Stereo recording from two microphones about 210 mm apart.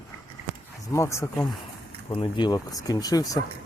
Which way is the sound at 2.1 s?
25° left (ahead or behind).